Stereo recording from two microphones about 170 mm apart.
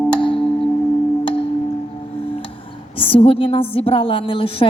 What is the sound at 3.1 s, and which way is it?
A woman's voice, 35° left (ahead or behind).